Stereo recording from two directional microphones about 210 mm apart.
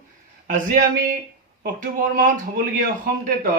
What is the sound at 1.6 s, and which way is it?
Speech, 40° right (ahead or behind).